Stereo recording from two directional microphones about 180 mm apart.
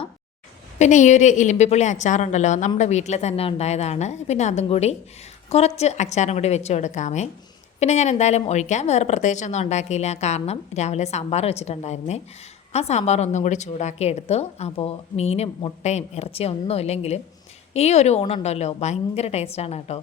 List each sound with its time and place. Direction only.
0.8 s a woman's voice: 40° left (ahead or behind)